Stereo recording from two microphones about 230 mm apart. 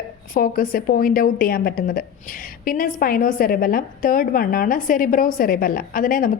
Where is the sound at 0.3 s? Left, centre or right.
Left.